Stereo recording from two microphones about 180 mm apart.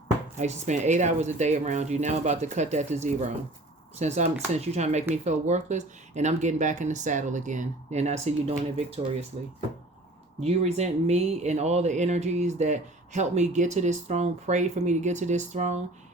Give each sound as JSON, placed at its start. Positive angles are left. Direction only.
{"t": 0.3, "sound": "speech", "side_deg": -40}
{"t": 10.4, "sound": "speech", "side_deg": -35}